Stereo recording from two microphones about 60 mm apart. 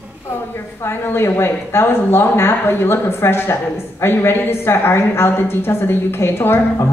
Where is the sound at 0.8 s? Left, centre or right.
Left.